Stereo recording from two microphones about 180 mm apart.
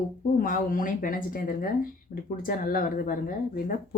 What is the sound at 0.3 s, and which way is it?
Speech, 50° left (ahead or behind).